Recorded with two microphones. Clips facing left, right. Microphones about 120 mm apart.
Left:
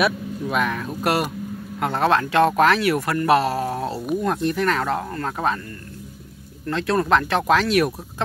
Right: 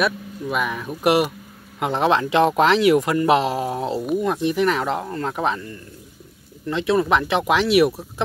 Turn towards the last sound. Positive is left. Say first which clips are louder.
# right 2 dB
turn(degrees=-10)  # may be behind; listen again after turning